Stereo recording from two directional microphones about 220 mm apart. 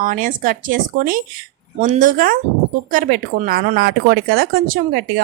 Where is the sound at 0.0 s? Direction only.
40° right (ahead or behind).